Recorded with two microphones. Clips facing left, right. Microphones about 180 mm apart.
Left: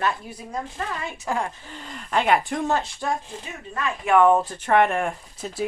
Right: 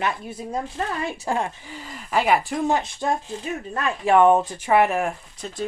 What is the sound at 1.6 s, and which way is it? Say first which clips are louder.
Speech: right 1 dB; 5° right (ahead or behind).